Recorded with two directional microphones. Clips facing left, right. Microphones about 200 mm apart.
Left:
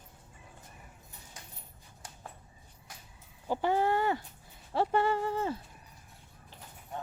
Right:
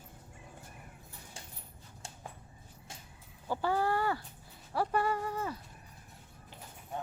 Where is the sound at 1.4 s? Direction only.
30° right (ahead or behind).